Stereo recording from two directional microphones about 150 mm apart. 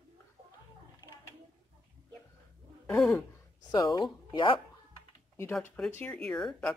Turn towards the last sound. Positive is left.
turn(degrees=5)  # may be behind; listen again after turning